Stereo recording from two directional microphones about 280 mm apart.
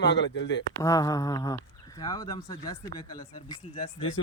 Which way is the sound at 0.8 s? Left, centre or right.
Centre.